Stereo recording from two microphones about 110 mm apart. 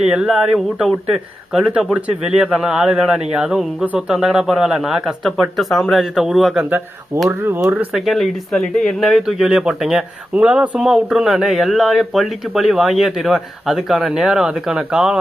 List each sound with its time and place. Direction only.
0.0 s speech: 5° right (ahead or behind)
7.3 s speech: 25° right (ahead or behind)
7.7 s speech: 5° right (ahead or behind)